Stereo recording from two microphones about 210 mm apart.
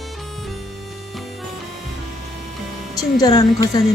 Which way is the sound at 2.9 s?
15° left (ahead or behind).